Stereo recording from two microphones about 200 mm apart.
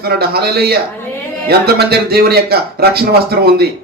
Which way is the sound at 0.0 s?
50° right (ahead or behind).